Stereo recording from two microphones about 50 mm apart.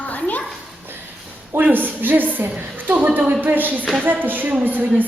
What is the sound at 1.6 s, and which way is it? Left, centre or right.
A woman's voice, right.